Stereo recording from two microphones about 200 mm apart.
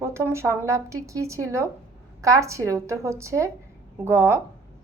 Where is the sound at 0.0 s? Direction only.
15° right (ahead or behind).